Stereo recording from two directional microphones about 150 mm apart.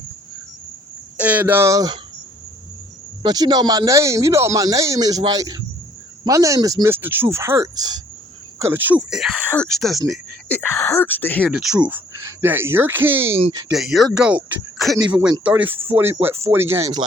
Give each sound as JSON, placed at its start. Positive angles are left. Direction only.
{"t": 1.1, "sound": "speech", "side_deg": -10}
{"t": 3.2, "sound": "speech", "side_deg": -25}
{"t": 10.5, "sound": "speech", "side_deg": 15}
{"t": 11.4, "sound": "speech", "side_deg": -5}
{"t": 13.7, "sound": "speech", "side_deg": 0}
{"t": 15.7, "sound": "speech", "side_deg": -35}
{"t": 16.5, "sound": "speech", "side_deg": -15}